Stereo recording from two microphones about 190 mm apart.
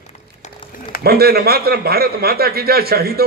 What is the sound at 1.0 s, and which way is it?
A man's voice, 55° right (ahead or behind).